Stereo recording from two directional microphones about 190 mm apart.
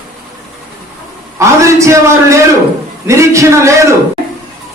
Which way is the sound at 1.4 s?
15° right (ahead or behind).